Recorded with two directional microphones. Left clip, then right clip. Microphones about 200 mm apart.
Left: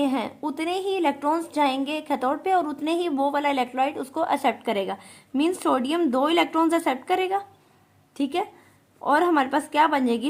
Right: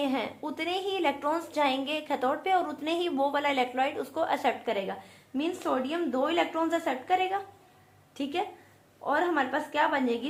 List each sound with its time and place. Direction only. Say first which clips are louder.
0.0 s a woman's voice: left 5 dB; 35° left (ahead or behind)